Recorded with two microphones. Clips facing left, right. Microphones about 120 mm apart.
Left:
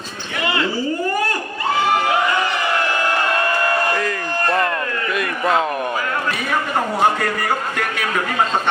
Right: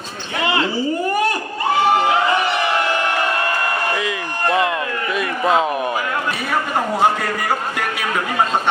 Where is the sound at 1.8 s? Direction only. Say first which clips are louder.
Right 2 dB; 20° right (ahead or behind).